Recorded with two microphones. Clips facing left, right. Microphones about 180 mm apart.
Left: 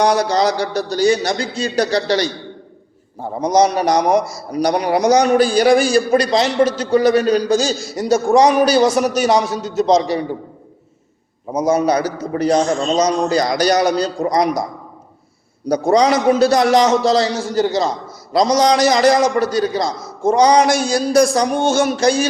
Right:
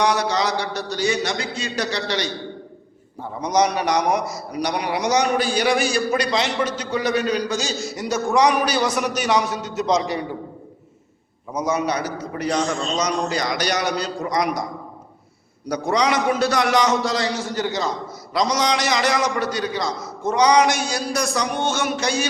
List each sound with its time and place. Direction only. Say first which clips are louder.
0.0 s a man's voice: left 5 dB; 40° left (ahead or behind)
11.5 s a man's voice: left 7 dB; 40° left (ahead or behind)
15.7 s a man's voice: left 7 dB; 40° left (ahead or behind)